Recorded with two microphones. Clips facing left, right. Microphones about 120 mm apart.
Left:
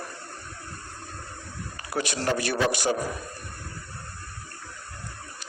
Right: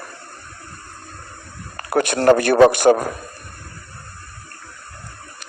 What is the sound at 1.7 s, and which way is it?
A man's voice, 55° right (ahead or behind).